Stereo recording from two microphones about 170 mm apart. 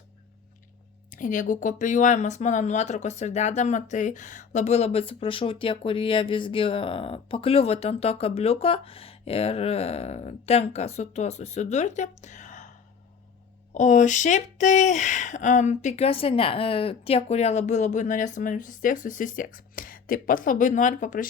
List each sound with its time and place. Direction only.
1.1 s speech: 50° left (ahead or behind)
13.7 s speech: 45° left (ahead or behind)